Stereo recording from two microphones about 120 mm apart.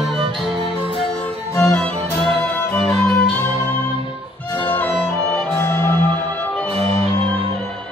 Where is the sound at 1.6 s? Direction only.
10° left (ahead or behind).